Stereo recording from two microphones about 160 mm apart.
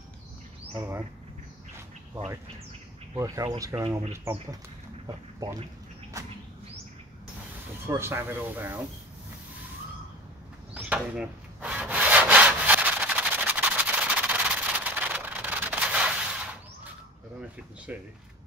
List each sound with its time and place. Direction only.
0.7 s speech: 15° right (ahead or behind)
3.2 s speech: 20° right (ahead or behind)
7.8 s speech: 15° right (ahead or behind)
10.7 s rub: 10° right (ahead or behind)
17.9 s speech: 10° right (ahead or behind)